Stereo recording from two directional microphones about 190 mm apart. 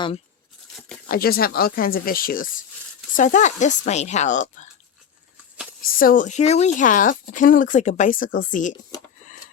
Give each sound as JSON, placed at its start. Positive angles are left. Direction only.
{"t": 1.0, "sound": "a woman's voice", "side_deg": 50}
{"t": 6.0, "sound": "speech", "side_deg": 45}